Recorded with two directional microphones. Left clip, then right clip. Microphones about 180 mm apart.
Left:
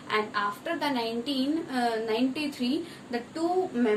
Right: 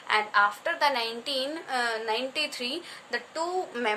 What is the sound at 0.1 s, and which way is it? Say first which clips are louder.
A woman's voice: right 5 dB; 45° right (ahead or behind).